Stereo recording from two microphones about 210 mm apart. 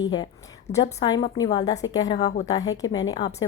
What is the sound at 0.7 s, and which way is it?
Speech, 30° left (ahead or behind).